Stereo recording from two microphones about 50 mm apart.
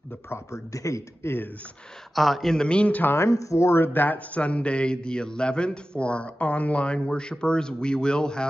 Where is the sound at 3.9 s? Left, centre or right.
Left; by 8.5 s centre.